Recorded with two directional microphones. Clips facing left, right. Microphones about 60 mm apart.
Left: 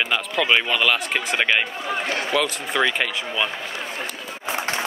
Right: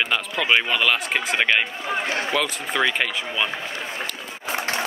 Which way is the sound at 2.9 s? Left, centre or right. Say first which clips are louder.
Even; centre.